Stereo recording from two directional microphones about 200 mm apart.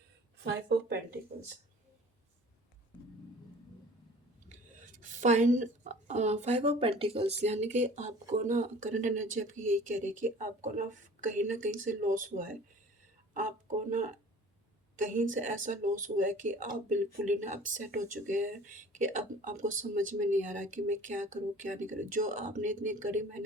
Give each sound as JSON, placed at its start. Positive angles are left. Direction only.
{"t": 4.4, "sound": "a woman's voice", "side_deg": -40}
{"t": 14.9, "sound": "speech", "side_deg": -40}